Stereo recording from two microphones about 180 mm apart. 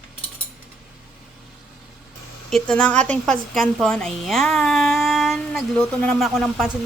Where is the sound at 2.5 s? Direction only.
5° left (ahead or behind).